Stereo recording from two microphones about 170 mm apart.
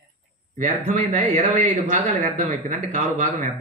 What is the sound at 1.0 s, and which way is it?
Speech, 45° right (ahead or behind).